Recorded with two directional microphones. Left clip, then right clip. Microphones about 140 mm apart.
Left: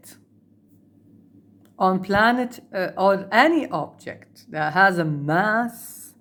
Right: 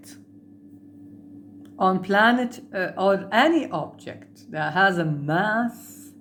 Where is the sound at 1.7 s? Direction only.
25° left (ahead or behind).